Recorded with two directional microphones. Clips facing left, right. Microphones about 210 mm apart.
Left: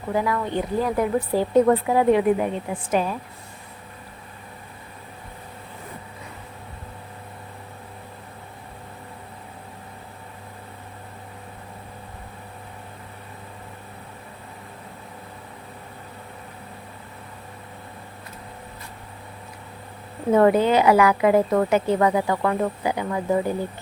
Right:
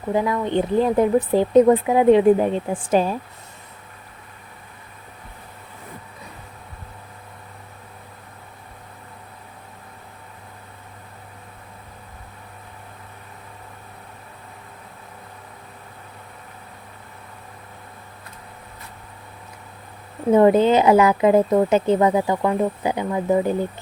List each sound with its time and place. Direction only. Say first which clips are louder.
0.1 s speech: right 3 dB; 20° right (ahead or behind)
20.3 s speech: right 3 dB; 20° right (ahead or behind)